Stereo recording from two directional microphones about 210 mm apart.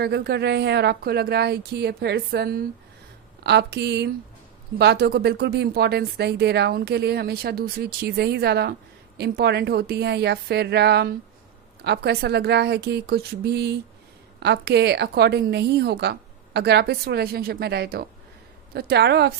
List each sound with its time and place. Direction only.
0.0 s speech: 50° right (ahead or behind)